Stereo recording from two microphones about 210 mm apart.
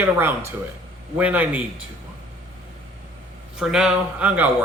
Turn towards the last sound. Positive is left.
turn(degrees=-5)  # may be behind; listen again after turning